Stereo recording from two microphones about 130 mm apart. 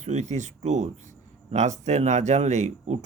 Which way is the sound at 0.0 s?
65° right (ahead or behind).